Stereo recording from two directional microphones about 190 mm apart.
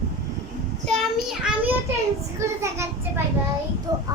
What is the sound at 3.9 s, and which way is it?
Child singing, 20° right (ahead or behind).